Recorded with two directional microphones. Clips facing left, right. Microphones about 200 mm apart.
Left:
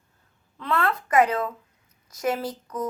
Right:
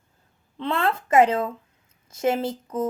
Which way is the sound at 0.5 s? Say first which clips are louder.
Right 1 dB; 25° right (ahead or behind).